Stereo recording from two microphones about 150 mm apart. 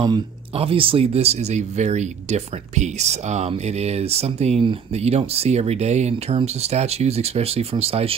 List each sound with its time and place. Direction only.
0.0 s speech: 35° right (ahead or behind)